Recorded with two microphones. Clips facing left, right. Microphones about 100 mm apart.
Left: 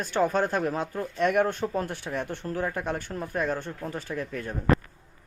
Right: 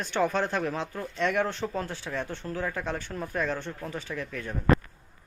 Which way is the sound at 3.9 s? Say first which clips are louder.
Left 4 dB; 45° left (ahead or behind).